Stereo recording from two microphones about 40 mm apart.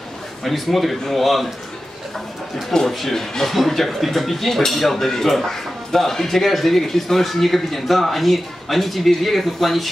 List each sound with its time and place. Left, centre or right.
0.4 s speech: centre
2.9 s speech: centre